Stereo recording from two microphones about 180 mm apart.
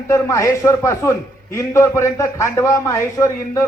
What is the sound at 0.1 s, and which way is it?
A man's voice, 15° left (ahead or behind).